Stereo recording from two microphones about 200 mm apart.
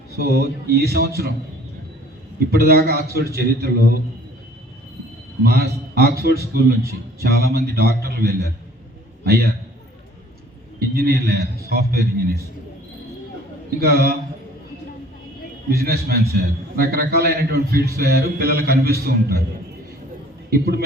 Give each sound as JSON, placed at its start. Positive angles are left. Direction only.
{"t": 0.3, "sound": "a man's voice", "side_deg": -50}
{"t": 2.5, "sound": "a man's voice", "side_deg": -50}
{"t": 5.4, "sound": "a man's voice", "side_deg": -50}
{"t": 10.8, "sound": "a man's voice", "side_deg": -50}
{"t": 13.7, "sound": "a man's voice", "side_deg": -50}
{"t": 15.8, "sound": "a man's voice", "side_deg": -50}
{"t": 20.5, "sound": "a man's voice", "side_deg": -50}